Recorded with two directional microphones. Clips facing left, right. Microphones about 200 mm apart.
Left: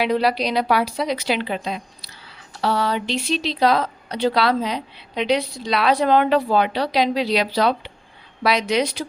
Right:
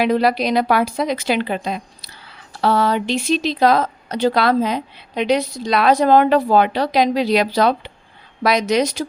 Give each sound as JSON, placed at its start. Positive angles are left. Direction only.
{"t": 0.0, "sound": "a woman's voice", "side_deg": -45}